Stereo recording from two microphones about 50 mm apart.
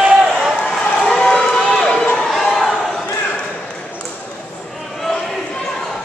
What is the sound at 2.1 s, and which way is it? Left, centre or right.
Crowd, centre.